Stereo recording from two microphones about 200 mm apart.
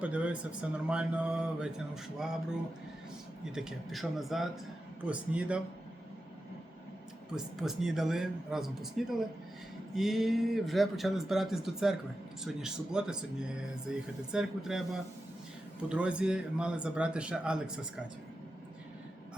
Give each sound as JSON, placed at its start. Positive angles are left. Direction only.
{"t": 0.0, "sound": "speech", "side_deg": -5}
{"t": 3.4, "sound": "speech", "side_deg": -5}
{"t": 7.3, "sound": "speech", "side_deg": 0}
{"t": 15.9, "sound": "speech", "side_deg": -5}